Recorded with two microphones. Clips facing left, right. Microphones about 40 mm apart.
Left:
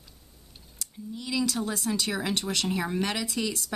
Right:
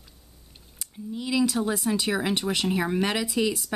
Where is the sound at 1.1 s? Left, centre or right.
Centre.